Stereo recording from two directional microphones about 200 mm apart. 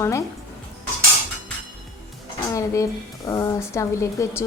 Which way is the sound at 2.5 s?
15° left (ahead or behind).